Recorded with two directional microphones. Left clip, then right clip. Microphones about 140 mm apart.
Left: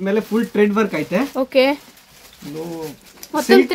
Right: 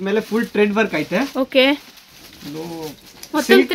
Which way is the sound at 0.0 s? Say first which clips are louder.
Even; 10° left (ahead or behind).